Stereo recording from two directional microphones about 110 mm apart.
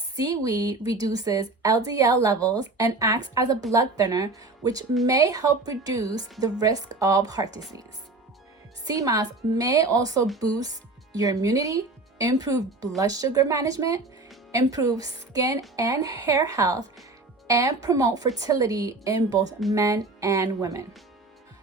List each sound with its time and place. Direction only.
0.2 s speech: 35° right (ahead or behind)
8.9 s speech: 30° right (ahead or behind)